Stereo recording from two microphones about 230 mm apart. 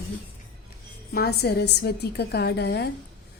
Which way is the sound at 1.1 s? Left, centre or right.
Left.